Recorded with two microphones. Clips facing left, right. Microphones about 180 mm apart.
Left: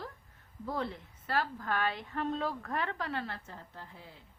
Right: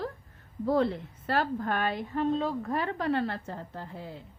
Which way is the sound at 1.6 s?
50° right (ahead or behind).